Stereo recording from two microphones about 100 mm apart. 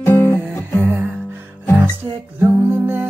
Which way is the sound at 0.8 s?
20° right (ahead or behind).